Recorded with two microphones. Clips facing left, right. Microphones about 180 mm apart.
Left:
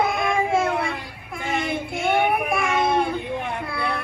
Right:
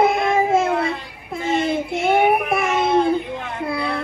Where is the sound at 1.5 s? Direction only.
30° right (ahead or behind).